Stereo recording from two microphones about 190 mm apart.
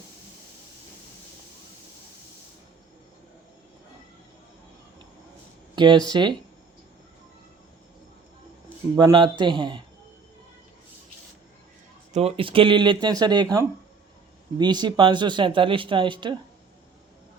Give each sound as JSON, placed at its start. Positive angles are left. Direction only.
{"t": 5.7, "sound": "speech", "side_deg": -25}
{"t": 9.0, "sound": "speech", "side_deg": -25}
{"t": 12.1, "sound": "speech", "side_deg": -30}